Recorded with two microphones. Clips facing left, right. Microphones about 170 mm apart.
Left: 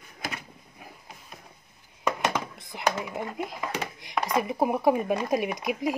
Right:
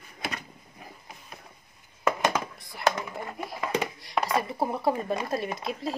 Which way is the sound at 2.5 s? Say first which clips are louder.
Right 1 dB; 20° left (ahead or behind).